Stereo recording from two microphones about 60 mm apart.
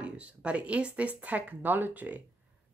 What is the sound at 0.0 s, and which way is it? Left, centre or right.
Speech, right.